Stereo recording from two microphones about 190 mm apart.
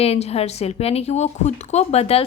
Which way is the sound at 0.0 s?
30° left (ahead or behind).